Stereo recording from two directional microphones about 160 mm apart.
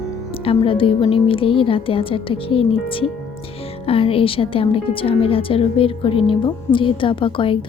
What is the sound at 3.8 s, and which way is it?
A woman's voice, 35° left (ahead or behind).